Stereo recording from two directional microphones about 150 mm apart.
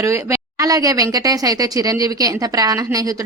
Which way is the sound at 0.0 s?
20° right (ahead or behind).